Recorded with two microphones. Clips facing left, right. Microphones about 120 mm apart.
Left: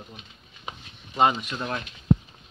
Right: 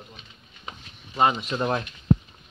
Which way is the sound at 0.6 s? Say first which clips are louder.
Left 1 dB; 5° left (ahead or behind).